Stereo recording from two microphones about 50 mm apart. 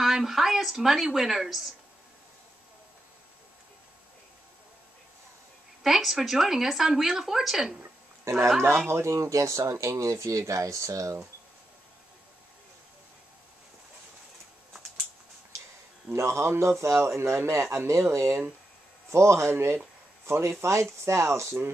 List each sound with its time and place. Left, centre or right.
0.0 s speech: centre
5.9 s speech: centre
8.3 s speech: right
8.8 s speech: right
16.2 s a man's voice: right